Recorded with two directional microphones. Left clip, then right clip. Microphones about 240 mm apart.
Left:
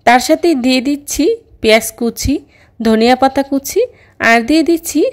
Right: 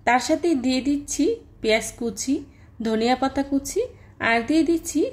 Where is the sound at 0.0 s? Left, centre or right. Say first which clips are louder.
Left 11 dB; left.